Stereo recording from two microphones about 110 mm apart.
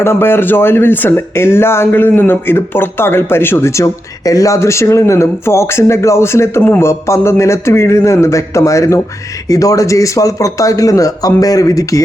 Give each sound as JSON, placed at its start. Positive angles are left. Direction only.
{"t": 0.0, "sound": "speech", "side_deg": 20}